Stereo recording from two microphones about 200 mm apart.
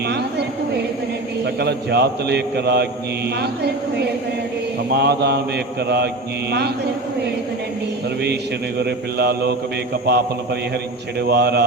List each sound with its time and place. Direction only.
0.1 s a sound: 55° right (ahead or behind)
1.5 s a man's voice: 55° right (ahead or behind)
8.8 s a man's voice: 55° right (ahead or behind)